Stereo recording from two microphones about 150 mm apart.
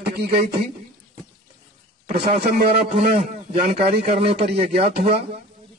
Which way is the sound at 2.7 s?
45° right (ahead or behind).